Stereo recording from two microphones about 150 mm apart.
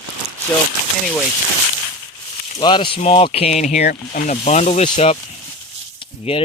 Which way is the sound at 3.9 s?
60° left (ahead or behind).